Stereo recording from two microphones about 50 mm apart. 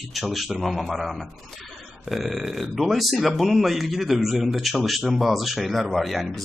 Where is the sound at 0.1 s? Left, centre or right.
Centre.